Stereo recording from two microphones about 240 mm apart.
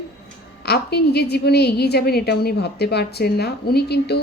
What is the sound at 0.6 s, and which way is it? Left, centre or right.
A woman's voice, left.